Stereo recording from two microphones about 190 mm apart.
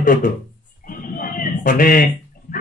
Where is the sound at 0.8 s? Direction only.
45° left (ahead or behind).